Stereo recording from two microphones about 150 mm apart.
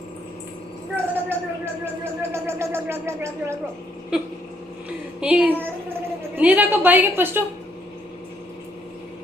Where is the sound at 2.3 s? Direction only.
20° right (ahead or behind).